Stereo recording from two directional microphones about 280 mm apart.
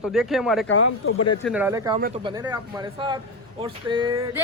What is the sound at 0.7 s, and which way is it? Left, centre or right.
Speech, left.